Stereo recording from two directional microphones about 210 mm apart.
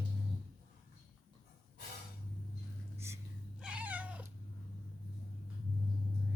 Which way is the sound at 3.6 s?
5° right (ahead or behind).